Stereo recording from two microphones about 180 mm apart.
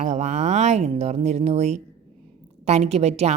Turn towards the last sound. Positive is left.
turn(degrees=-35)  # may be behind; listen again after turning